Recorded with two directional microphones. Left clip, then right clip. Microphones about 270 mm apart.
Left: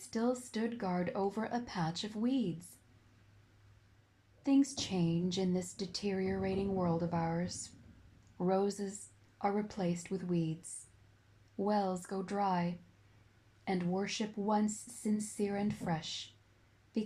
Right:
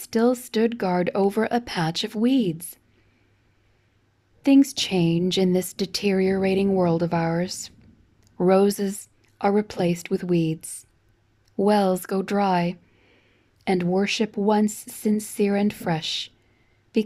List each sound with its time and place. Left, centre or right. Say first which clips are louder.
0.0 s a woman's voice: right 14 dB; right
4.4 s a woman's voice: right 13 dB; right
16.9 s a sound: right 15 dB; right